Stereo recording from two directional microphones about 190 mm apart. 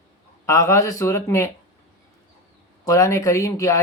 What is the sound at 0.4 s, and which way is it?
Speech, 15° left (ahead or behind).